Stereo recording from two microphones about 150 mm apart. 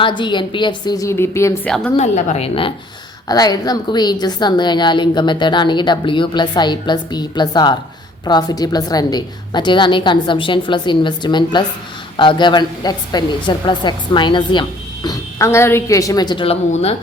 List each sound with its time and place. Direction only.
0.0 s a woman's voice: 30° left (ahead or behind)
2.0 s a woman's voice: 45° left (ahead or behind)
3.2 s a woman's voice: 25° left (ahead or behind)
15.0 s a woman's voice: 20° left (ahead or behind)